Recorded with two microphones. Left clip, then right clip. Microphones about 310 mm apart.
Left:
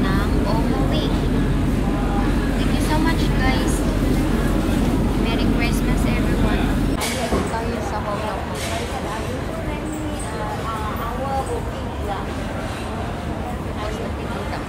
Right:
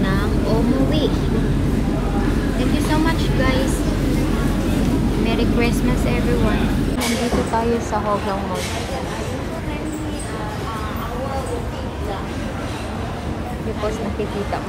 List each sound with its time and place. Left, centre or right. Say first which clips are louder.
0.0 s vehicle: right 1 dB; centre
3.2 s vehicle: right 2 dB; centre
5.3 s vehicle: right 4 dB; centre